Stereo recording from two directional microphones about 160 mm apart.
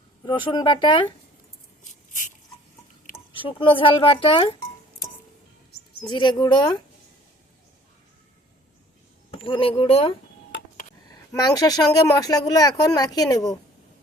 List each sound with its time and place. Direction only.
0.3 s speech: 30° left (ahead or behind)
3.6 s speech: 30° left (ahead or behind)
5.7 s cricket: 80° left
6.1 s speech: 30° left (ahead or behind)
9.4 s speech: 35° left (ahead or behind)
11.3 s speech: 25° left (ahead or behind)